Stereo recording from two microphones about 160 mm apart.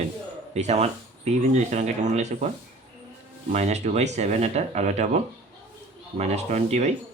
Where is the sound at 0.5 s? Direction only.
45° right (ahead or behind).